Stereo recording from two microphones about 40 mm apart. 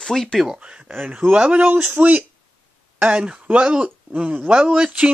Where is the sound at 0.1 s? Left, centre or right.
Centre.